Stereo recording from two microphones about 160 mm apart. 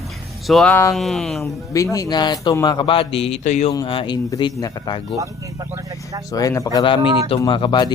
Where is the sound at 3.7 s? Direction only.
25° left (ahead or behind).